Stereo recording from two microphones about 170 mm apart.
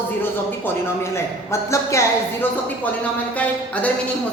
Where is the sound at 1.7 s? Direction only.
15° left (ahead or behind).